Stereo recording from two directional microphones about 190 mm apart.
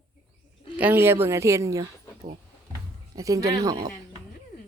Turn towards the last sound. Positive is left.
turn(degrees=-20)  # may be behind; listen again after turning